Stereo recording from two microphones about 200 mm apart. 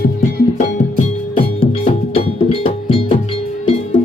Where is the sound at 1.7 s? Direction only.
30° left (ahead or behind).